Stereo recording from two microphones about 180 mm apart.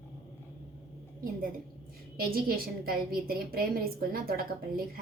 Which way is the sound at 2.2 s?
55° right (ahead or behind).